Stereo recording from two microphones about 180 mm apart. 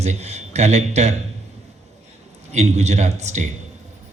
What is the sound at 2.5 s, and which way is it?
Speech, 40° right (ahead or behind).